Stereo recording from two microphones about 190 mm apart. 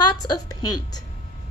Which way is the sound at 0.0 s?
20° left (ahead or behind).